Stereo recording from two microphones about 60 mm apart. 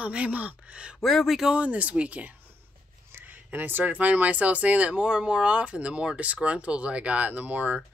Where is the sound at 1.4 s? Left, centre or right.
Right.